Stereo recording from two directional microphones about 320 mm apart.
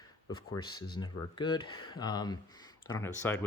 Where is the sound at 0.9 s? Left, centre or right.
Centre.